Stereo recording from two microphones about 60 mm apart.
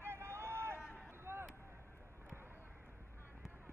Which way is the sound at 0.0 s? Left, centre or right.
Right.